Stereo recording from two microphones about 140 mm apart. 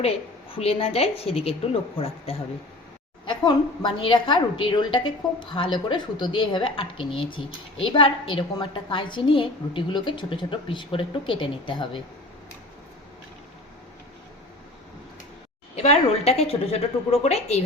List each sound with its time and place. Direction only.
0.5 s a woman's voice: 45° left (ahead or behind)
3.2 s a woman's voice: 35° left (ahead or behind)
15.7 s a woman's voice: 50° left (ahead or behind)